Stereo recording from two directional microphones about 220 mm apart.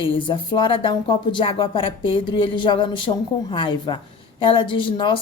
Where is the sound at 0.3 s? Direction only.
20° left (ahead or behind).